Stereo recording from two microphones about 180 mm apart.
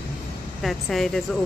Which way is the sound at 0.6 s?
Centre (ahead or behind).